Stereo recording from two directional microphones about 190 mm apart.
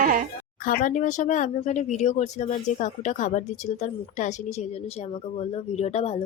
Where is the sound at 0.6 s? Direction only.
50° left (ahead or behind).